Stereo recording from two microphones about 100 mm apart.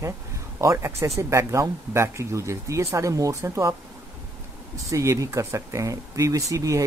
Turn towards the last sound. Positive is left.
turn(degrees=-35)  # may be behind; listen again after turning